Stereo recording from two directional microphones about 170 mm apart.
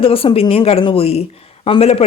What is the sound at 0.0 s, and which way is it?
Speech, 35° left (ahead or behind).